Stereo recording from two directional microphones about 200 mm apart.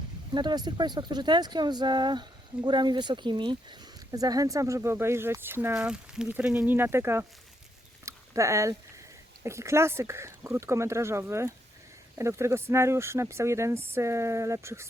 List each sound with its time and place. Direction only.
0.3 s speech: 20° right (ahead or behind)
8.0 s a sound: 15° right (ahead or behind)
9.4 s speech: 15° right (ahead or behind)